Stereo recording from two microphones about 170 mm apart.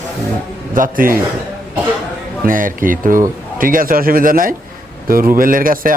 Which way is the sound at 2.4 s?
55° right (ahead or behind).